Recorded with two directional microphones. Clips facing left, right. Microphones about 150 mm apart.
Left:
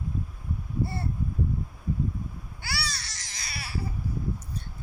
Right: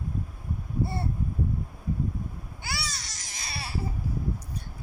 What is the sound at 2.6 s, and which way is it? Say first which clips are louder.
Baby cry: left 1 dB; 20° right (ahead or behind).